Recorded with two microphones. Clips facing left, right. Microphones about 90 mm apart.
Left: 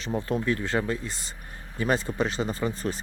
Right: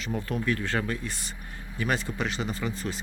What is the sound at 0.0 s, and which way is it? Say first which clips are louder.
Speech: left 2 dB; 30° left (ahead or behind).